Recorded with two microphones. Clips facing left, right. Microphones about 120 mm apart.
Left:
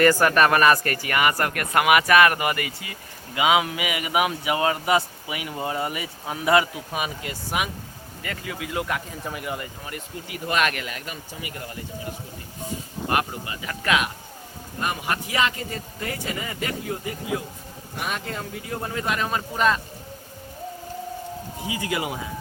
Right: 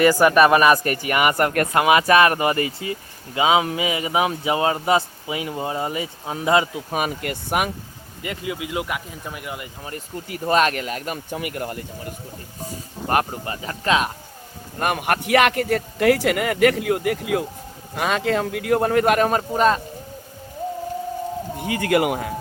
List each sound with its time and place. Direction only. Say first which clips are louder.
0.0 s speech: right 3 dB; 10° right (ahead or behind)
6.9 s speech: right 5 dB; 50° right (ahead or behind)
8.2 s speech: right 4 dB; 15° right (ahead or behind)
9.2 s speech: left 2 dB; centre (ahead or behind)
10.2 s speech: right 5 dB; 40° right (ahead or behind)
13.1 s speech: right 4 dB; 40° right (ahead or behind)
14.8 s a man's voice: right 5 dB; 60° right (ahead or behind); by 17.4 s 75° right (ahead or behind)
17.9 s a man's voice: right 9 dB; 90° right; by 19.8 s 40° right (ahead or behind)
21.6 s speech: right 8 dB; 60° right (ahead or behind)